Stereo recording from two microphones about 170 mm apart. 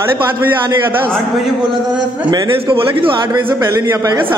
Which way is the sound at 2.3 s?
25° right (ahead or behind).